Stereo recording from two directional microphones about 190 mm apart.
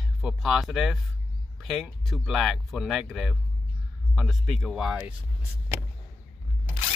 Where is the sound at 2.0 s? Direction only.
Centre (ahead or behind).